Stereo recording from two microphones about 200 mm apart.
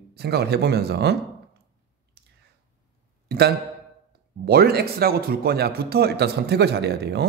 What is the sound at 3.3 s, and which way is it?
Speech, 55° right (ahead or behind).